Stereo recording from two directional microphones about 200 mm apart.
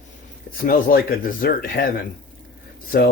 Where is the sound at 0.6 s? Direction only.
45° left (ahead or behind).